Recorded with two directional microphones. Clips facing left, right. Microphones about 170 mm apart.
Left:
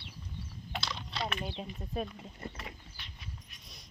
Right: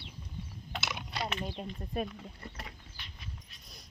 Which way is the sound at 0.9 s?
15° right (ahead or behind).